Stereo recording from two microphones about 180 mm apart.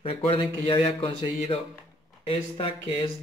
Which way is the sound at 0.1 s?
30° left (ahead or behind).